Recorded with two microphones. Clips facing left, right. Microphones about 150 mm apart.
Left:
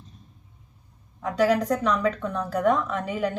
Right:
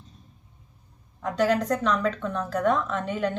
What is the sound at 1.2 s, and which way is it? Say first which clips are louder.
A woman's voice: left 2 dB; 5° left (ahead or behind).